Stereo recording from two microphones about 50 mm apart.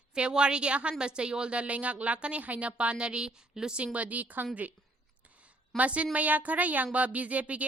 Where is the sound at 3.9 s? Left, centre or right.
Right.